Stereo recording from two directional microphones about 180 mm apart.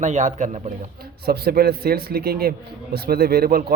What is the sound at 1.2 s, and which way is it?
Speech, 60° right (ahead or behind).